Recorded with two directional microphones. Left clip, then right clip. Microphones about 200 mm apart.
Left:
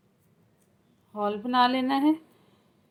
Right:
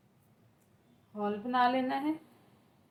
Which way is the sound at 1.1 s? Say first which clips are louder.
Left 6 dB; 45° left (ahead or behind).